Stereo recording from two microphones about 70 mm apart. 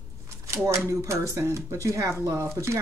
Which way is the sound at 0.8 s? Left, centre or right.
Right.